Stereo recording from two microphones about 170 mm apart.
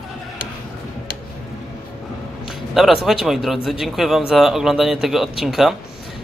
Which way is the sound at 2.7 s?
Centre (ahead or behind).